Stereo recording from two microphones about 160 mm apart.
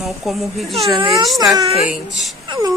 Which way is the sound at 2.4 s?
30° right (ahead or behind).